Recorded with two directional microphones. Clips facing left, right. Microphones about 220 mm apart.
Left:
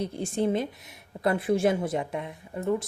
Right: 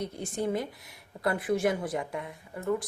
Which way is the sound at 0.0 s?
30° left (ahead or behind).